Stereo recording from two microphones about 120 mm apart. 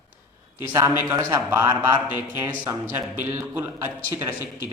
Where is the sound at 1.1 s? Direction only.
25° right (ahead or behind).